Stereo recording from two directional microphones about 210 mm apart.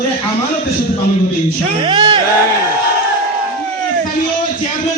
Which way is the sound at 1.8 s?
25° right (ahead or behind).